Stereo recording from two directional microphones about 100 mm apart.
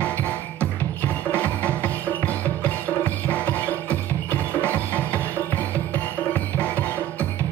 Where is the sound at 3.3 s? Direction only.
15° left (ahead or behind).